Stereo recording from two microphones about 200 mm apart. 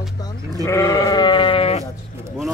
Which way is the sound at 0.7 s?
15° left (ahead or behind).